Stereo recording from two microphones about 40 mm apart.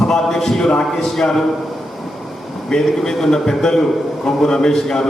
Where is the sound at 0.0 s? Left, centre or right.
Centre.